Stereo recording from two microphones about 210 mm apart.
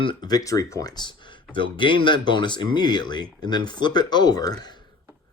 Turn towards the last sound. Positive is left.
turn(degrees=20)  # may be behind; listen again after turning